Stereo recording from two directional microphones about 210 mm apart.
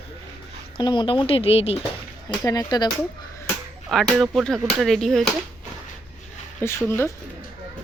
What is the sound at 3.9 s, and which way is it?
Speech, centre (ahead or behind).